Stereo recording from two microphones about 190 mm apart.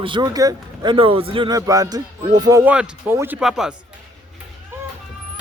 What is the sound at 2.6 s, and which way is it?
Speech, 5° right (ahead or behind).